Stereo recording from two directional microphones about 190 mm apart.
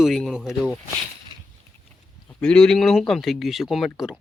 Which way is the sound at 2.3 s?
5° left (ahead or behind).